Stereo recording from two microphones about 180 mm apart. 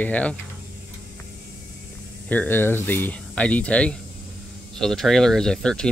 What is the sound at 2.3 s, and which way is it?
Speech, 10° left (ahead or behind).